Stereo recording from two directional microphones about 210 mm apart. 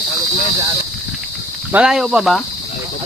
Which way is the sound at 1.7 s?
5° right (ahead or behind).